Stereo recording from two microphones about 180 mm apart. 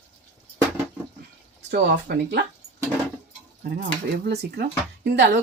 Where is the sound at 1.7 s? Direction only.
70° right (ahead or behind).